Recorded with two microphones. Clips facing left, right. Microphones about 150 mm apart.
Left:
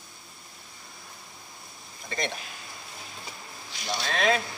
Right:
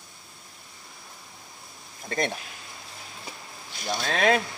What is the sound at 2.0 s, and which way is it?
Speech, 50° right (ahead or behind).